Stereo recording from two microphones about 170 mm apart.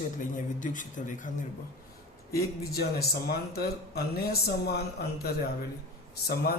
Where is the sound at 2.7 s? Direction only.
65° left (ahead or behind).